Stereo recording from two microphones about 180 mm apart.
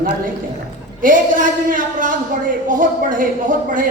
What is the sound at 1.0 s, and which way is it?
A man's voice, 50° right (ahead or behind).